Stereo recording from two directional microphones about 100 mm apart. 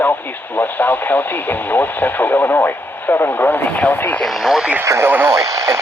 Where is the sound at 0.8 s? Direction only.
20° left (ahead or behind).